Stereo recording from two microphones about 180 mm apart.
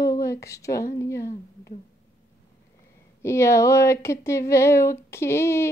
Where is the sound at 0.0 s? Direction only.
15° left (ahead or behind).